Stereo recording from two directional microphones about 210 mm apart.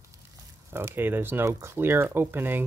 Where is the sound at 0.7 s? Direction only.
10° right (ahead or behind).